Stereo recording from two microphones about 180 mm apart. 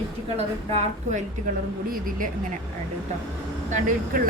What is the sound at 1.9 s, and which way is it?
Speech, 50° right (ahead or behind).